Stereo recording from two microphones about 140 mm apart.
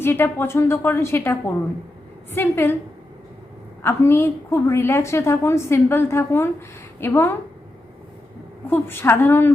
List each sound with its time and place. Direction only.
0.0 s a woman's voice: 15° left (ahead or behind)
3.8 s a woman's voice: 20° left (ahead or behind)
8.7 s a woman's voice: 15° left (ahead or behind)